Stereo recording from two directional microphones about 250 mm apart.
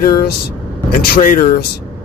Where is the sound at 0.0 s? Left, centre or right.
Left.